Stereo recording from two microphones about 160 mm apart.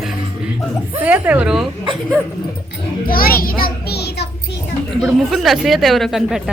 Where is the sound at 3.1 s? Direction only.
65° left (ahead or behind); by 4.2 s 90° left.